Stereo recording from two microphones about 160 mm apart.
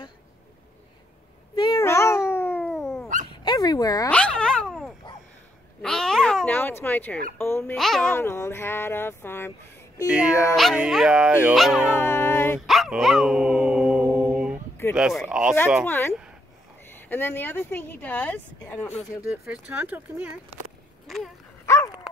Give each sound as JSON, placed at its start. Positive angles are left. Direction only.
{"t": 1.5, "sound": "cat", "side_deg": 30}
{"t": 3.4, "sound": "speech", "side_deg": 25}
{"t": 4.1, "sound": "a sound", "side_deg": 5}
{"t": 5.8, "sound": "cat", "side_deg": 5}
{"t": 7.3, "sound": "speech", "side_deg": 15}
{"t": 7.7, "sound": "speech", "side_deg": 0}
{"t": 8.2, "sound": "speech", "side_deg": 15}
{"t": 10.1, "sound": "speech", "side_deg": 0}
{"t": 12.0, "sound": "speech", "side_deg": 15}
{"t": 12.5, "sound": "speech", "side_deg": 0}
{"t": 15.8, "sound": "speech", "side_deg": 15}
{"t": 18.9, "sound": "speech", "side_deg": -5}
{"t": 21.6, "sound": "dog", "side_deg": 15}